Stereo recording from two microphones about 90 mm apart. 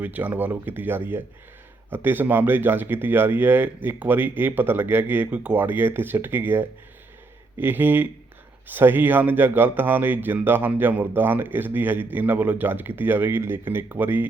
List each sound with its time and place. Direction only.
0.0 s speech: 20° right (ahead or behind)